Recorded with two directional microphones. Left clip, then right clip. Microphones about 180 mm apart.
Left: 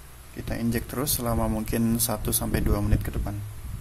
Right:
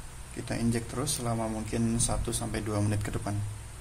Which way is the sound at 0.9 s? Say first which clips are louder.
Left 4 dB; 25° left (ahead or behind).